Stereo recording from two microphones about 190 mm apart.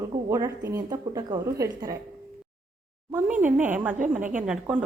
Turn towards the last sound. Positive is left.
turn(degrees=-5)  # may be behind; listen again after turning